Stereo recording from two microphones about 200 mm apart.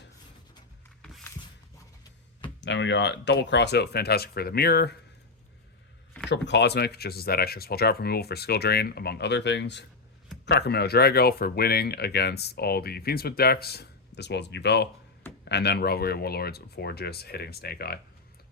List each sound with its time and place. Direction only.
1.0 s a sound: 5° left (ahead or behind)
2.6 s speech: 65° left (ahead or behind)
6.3 s speech: 60° left (ahead or behind)